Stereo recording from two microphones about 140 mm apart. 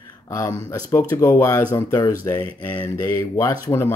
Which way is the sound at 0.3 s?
20° left (ahead or behind).